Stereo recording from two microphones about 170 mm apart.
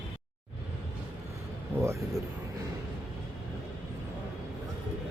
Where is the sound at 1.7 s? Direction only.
15° right (ahead or behind).